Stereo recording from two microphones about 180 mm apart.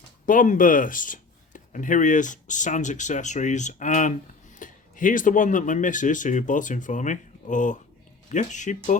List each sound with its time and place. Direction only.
0.3 s speech: 45° left (ahead or behind)